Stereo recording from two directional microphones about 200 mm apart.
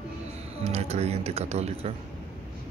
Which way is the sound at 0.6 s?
30° right (ahead or behind).